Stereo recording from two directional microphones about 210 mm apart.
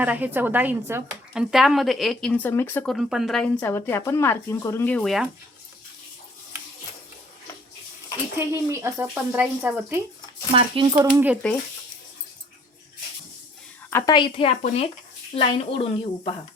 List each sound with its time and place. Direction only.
0.0 s speech: 10° right (ahead or behind)
8.7 s speech: 10° right (ahead or behind)
10.5 s speech: 25° right (ahead or behind)
13.9 s a woman's voice: 20° left (ahead or behind)